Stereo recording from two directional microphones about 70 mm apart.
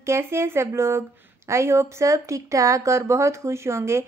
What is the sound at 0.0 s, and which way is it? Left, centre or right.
Speech, right.